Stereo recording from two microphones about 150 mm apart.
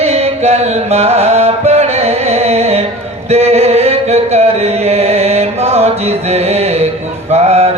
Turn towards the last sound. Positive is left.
turn(degrees=-45)  # may be behind; listen again after turning